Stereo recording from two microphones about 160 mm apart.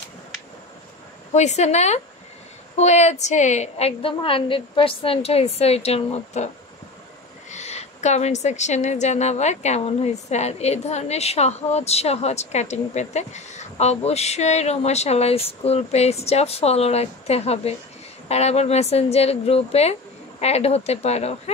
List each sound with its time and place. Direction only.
1.3 s a woman's voice: 45° left (ahead or behind)
7.5 s a woman's voice: 45° left (ahead or behind)